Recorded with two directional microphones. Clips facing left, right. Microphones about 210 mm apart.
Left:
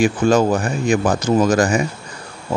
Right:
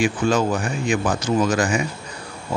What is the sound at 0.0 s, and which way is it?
Speech, 45° left (ahead or behind).